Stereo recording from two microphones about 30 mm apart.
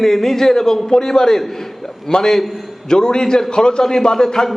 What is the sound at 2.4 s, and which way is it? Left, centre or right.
Speech, centre.